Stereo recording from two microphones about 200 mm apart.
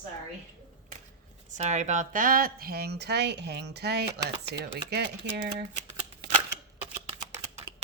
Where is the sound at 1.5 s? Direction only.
35° right (ahead or behind); by 5.4 s 55° right (ahead or behind).